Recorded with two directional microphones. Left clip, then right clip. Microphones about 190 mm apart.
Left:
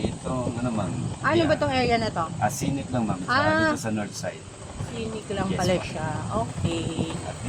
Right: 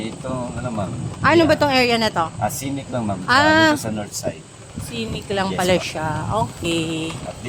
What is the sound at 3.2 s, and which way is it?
Speech, 40° right (ahead or behind).